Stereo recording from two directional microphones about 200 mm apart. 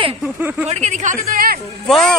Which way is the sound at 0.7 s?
35° right (ahead or behind).